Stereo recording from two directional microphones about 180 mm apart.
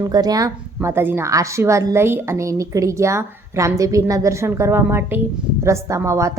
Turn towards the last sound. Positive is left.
turn(degrees=-15)  # may be behind; listen again after turning